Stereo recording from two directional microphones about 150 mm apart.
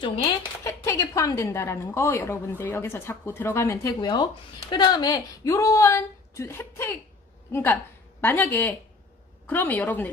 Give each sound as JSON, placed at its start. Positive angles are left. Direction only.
{"t": 0.6, "sound": "a woman's voice", "side_deg": 20}
{"t": 4.0, "sound": "a woman's voice", "side_deg": 30}